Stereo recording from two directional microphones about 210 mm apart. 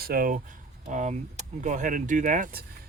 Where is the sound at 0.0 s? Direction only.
45° right (ahead or behind).